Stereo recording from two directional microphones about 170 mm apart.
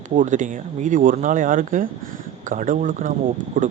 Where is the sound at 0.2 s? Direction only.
50° right (ahead or behind).